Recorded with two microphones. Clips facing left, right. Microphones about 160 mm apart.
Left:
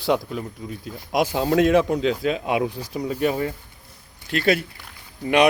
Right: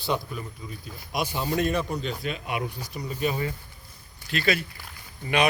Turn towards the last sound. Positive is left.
turn(degrees=70)  # may be behind; listen again after turning